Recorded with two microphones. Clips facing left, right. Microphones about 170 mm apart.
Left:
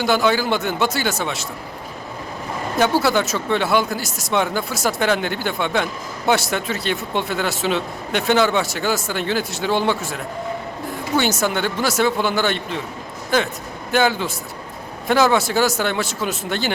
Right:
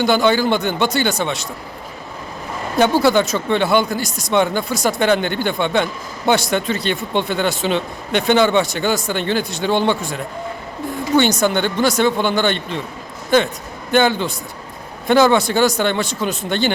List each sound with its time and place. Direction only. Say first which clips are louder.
0.0 s speech: right 3 dB; centre (ahead or behind)
2.7 s speech: right 4 dB; centre (ahead or behind)
11.2 s speech: right 4 dB; 5° left (ahead or behind)